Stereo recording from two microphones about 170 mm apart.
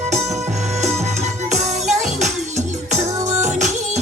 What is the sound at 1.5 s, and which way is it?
Music, 40° right (ahead or behind).